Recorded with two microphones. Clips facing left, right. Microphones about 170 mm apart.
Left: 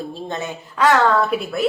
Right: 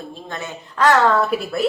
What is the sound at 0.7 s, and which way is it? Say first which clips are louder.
Speech: even; centre (ahead or behind).